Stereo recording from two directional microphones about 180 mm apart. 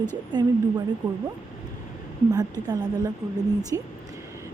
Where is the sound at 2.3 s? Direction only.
20° right (ahead or behind).